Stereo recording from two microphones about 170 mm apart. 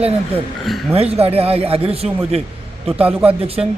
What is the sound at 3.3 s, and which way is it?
Speech, 35° right (ahead or behind).